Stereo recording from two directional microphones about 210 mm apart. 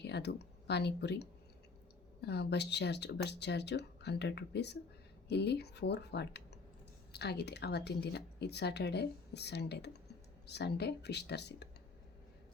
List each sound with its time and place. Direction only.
0.0 s speech: 55° left (ahead or behind)